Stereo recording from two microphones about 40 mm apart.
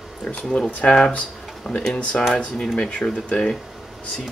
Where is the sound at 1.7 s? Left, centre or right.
Centre.